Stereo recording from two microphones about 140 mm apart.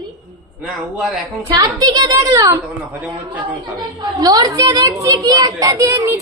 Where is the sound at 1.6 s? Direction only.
30° right (ahead or behind).